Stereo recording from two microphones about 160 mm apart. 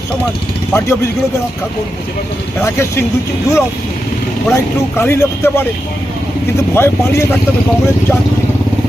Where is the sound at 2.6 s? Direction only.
15° left (ahead or behind).